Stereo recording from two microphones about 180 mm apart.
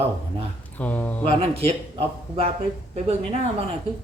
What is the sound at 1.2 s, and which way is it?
Speech, 30° right (ahead or behind).